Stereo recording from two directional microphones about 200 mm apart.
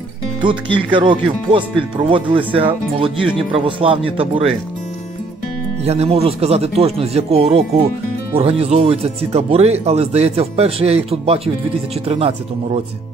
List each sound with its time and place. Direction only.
0.4 s speech: 25° right (ahead or behind)
5.9 s speech: 30° right (ahead or behind)